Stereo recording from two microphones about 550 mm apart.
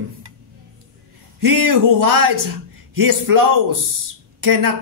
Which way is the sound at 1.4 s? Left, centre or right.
Right.